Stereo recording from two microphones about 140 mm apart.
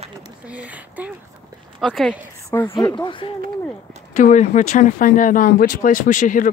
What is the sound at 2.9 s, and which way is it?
Speech, 35° left (ahead or behind).